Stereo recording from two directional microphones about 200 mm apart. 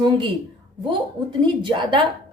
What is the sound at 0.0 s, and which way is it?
A woman's voice, 25° right (ahead or behind).